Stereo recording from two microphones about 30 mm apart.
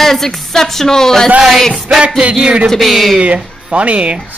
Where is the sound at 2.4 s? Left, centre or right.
Right.